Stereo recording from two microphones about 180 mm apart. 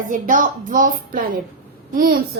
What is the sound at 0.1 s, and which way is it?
A woman's voice, 45° right (ahead or behind).